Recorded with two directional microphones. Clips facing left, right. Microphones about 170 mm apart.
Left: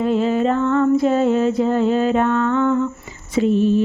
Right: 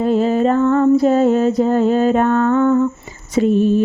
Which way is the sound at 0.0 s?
40° right (ahead or behind).